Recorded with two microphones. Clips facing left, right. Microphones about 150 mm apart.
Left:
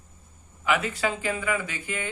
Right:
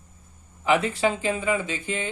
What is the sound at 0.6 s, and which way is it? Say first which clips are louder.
Speech: right 4 dB; 30° right (ahead or behind).